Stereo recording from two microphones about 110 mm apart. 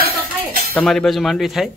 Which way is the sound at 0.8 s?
5° left (ahead or behind).